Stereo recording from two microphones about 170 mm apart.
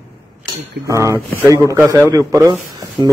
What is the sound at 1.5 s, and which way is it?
A man's voice, 20° right (ahead or behind).